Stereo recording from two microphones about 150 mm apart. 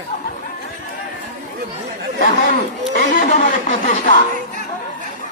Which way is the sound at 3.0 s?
60° left (ahead or behind).